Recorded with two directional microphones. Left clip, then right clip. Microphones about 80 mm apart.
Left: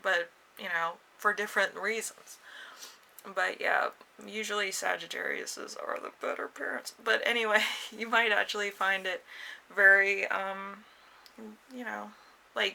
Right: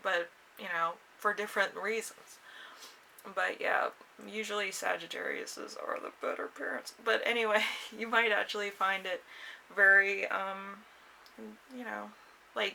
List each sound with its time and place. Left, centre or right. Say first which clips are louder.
0.0 s speech: left 3 dB; left